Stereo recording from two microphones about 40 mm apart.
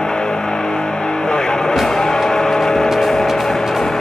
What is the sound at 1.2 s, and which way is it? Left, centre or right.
Music, centre.